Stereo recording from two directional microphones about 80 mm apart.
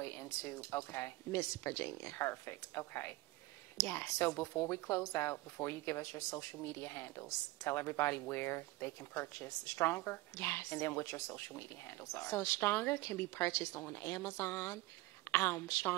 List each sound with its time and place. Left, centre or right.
0.0 s a woman's voice: left